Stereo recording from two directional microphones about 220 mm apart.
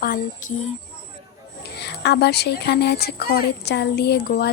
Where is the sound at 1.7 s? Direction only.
50° left (ahead or behind).